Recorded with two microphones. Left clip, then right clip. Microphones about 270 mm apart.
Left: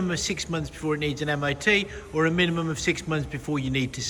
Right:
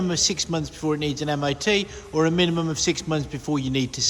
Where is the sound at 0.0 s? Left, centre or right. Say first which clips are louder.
Right 5 dB; centre.